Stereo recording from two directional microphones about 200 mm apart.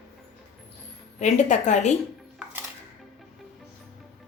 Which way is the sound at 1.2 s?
35° left (ahead or behind).